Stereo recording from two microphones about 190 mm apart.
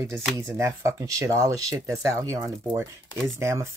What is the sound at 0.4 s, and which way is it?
Speech, 15° right (ahead or behind).